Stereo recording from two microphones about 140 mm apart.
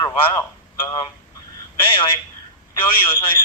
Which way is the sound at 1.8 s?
35° left (ahead or behind).